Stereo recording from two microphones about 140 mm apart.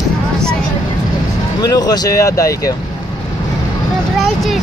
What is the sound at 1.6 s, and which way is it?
Speech, 25° left (ahead or behind).